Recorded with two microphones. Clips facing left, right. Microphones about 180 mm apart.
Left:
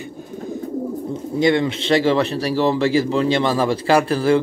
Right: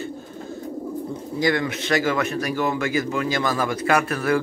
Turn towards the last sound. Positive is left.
turn(degrees=30)  # may be behind; listen again after turning